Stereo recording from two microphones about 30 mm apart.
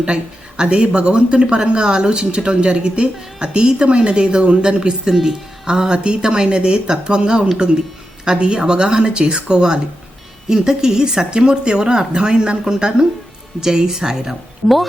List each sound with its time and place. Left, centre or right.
0.0 s speech: right
0.8 s speech: right
1.1 s speech: right
10.8 s a woman's voice: centre